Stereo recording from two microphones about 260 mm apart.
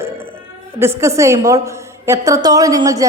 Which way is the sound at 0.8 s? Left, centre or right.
Centre.